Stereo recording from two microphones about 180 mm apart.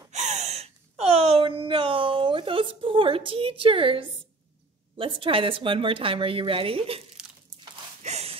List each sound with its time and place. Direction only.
0.1 s gasp: 40° right (ahead or behind)
4.9 s speech: 30° right (ahead or behind)
7.2 s crumpling: 5° right (ahead or behind)
8.0 s a sound: 35° right (ahead or behind)